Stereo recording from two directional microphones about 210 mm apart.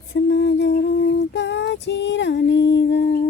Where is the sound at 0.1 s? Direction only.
60° left (ahead or behind).